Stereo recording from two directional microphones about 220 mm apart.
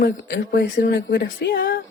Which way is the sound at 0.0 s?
45° left (ahead or behind).